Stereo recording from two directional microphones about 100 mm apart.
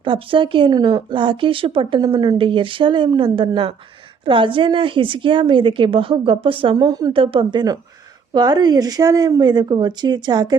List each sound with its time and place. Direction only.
0.0 s a woman's voice: 60° right (ahead or behind)
2.0 s a woman's voice: 40° right (ahead or behind)
2.4 s a woman's voice: 60° right (ahead or behind)
6.7 s a woman's voice: 40° right (ahead or behind)
7.1 s a woman's voice: 60° right (ahead or behind); by 10.6 s 45° right (ahead or behind)